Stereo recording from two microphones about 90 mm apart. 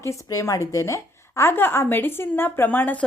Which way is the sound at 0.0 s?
35° left (ahead or behind).